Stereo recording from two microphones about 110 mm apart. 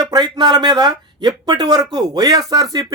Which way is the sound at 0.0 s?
35° right (ahead or behind).